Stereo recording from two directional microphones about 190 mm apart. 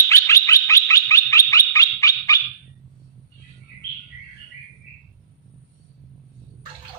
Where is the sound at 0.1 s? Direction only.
15° left (ahead or behind).